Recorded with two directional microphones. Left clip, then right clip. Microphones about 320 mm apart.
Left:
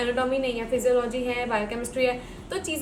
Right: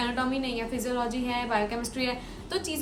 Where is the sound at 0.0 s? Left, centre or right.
Centre.